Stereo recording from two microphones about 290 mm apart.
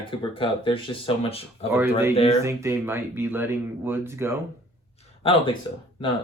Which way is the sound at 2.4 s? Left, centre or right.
Centre.